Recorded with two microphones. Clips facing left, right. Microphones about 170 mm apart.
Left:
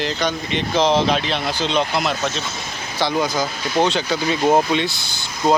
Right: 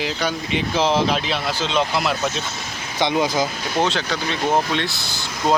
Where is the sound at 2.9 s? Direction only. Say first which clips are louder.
Right 1 dB; 20° right (ahead or behind).